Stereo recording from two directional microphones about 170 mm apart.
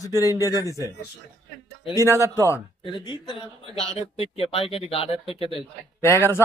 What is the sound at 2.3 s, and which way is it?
Speech, 15° left (ahead or behind).